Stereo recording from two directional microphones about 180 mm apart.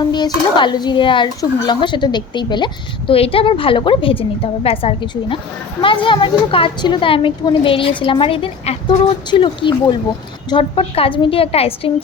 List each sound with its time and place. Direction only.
0.0 s a woman's voice: 25° left (ahead or behind)